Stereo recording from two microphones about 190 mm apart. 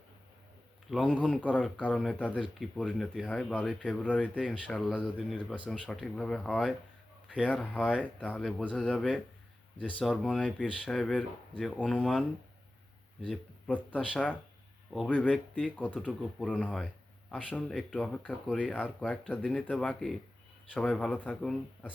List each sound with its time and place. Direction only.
0.9 s speech: centre (ahead or behind)
13.2 s speech: 5° left (ahead or behind)